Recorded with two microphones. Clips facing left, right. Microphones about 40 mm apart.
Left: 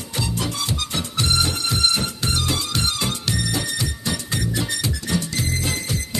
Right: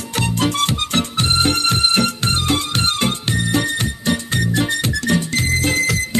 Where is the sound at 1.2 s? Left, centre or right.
Right.